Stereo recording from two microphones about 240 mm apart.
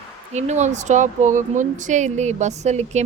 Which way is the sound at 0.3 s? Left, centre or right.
Right.